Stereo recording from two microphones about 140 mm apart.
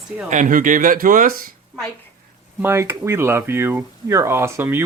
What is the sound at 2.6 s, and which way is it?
Speech, 15° right (ahead or behind).